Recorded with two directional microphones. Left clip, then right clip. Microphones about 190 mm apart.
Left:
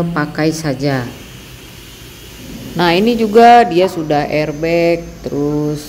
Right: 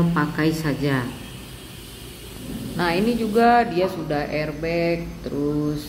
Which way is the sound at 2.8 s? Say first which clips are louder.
Left 10 dB; 40° left (ahead or behind).